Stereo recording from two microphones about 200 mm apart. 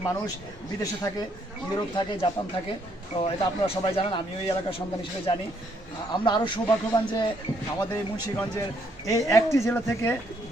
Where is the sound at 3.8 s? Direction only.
25° left (ahead or behind).